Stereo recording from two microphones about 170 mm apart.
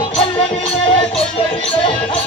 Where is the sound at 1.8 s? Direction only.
30° left (ahead or behind).